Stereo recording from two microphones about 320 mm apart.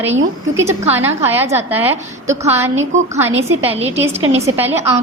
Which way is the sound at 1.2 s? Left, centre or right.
Centre.